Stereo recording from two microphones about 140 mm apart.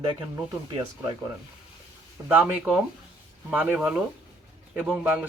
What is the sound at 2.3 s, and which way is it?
Speech, 10° right (ahead or behind).